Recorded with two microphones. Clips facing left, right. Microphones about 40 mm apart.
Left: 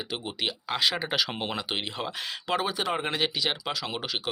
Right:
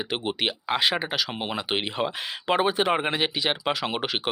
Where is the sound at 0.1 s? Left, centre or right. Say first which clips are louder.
Right 4 dB; right.